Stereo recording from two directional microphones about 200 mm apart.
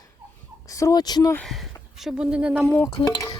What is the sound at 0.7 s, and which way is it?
Speech, 15° left (ahead or behind).